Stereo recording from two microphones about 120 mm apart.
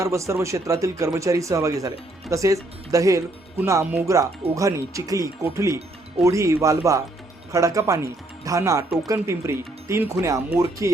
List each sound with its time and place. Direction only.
0.0 s speech: 25° right (ahead or behind)